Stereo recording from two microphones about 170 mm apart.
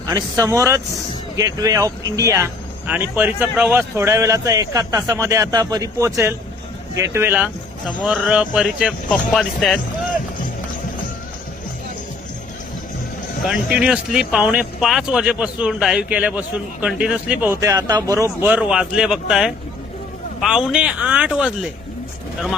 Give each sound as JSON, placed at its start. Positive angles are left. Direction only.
{"t": 0.1, "sound": "speech", "side_deg": -20}
{"t": 13.5, "sound": "speech", "side_deg": -5}
{"t": 17.6, "sound": "speech", "side_deg": -20}